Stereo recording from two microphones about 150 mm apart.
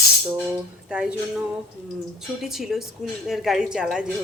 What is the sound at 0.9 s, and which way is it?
Speech, 5° right (ahead or behind).